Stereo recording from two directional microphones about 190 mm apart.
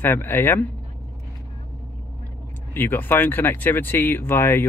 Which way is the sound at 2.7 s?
10° left (ahead or behind).